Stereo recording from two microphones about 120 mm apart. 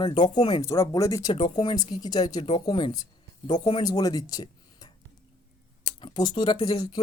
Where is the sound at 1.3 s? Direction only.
40° left (ahead or behind).